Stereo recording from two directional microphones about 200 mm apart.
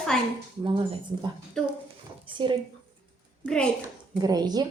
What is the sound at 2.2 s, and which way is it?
Speech, 25° right (ahead or behind).